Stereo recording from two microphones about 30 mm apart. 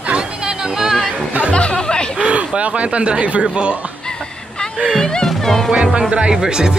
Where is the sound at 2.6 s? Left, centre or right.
Right.